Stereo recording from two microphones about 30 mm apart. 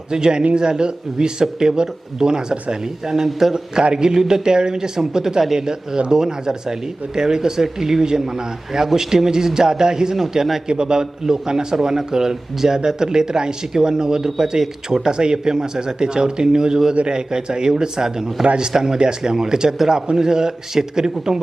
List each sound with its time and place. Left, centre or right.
0.1 s a man's voice: right